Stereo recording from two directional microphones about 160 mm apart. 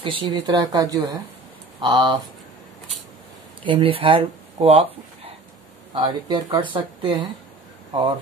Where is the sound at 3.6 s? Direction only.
35° right (ahead or behind).